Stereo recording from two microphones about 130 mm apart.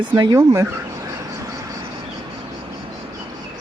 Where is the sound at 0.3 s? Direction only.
20° right (ahead or behind).